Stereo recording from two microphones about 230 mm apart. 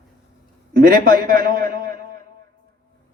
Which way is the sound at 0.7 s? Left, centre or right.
Right.